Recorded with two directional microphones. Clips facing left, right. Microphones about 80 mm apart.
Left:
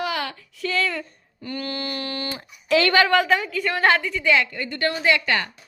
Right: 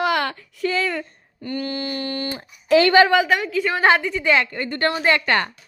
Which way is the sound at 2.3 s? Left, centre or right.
Right.